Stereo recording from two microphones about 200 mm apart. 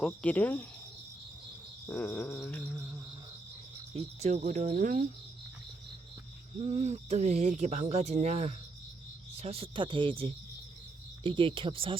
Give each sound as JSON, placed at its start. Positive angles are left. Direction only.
{"t": 0.0, "sound": "mantra", "side_deg": 5}
{"t": 1.9, "sound": "mantra", "side_deg": 10}
{"t": 3.9, "sound": "speech", "side_deg": -35}
{"t": 6.6, "sound": "speech", "side_deg": -35}